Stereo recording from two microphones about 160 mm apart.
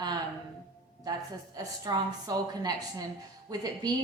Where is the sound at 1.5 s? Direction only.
25° right (ahead or behind).